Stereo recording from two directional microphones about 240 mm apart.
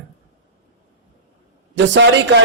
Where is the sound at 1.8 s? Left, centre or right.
Right.